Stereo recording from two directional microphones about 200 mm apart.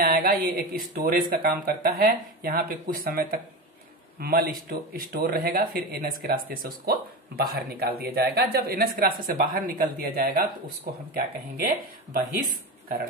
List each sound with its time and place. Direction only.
0.0 s speech: 45° right (ahead or behind)